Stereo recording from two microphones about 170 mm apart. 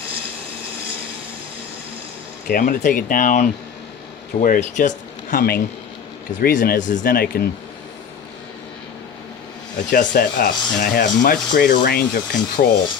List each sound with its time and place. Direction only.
2.5 s speech: 55° left (ahead or behind)
9.9 s speech: 55° left (ahead or behind)